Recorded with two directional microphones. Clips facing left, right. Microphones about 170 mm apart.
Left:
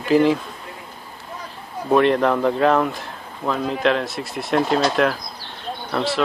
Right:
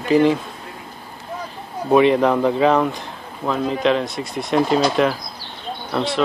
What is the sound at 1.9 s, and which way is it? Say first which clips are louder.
Speech: right 2 dB; centre (ahead or behind).